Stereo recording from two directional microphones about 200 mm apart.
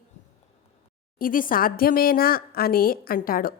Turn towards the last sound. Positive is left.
turn(degrees=45)  # may be behind; listen again after turning